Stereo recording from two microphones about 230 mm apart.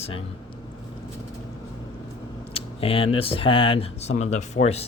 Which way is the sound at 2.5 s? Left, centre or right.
Left.